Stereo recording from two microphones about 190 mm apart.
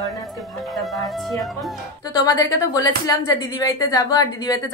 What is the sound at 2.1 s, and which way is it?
A woman's voice, 20° left (ahead or behind).